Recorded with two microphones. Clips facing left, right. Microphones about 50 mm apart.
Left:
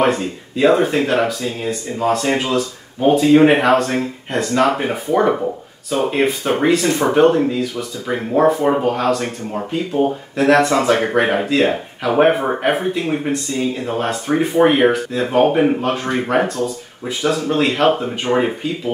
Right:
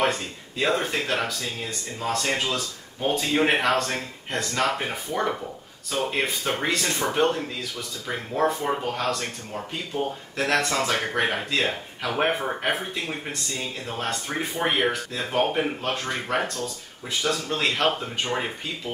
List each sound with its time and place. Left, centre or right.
0.0 s speech: centre
15.8 s speech: centre
16.1 s speech: centre
16.4 s speech: centre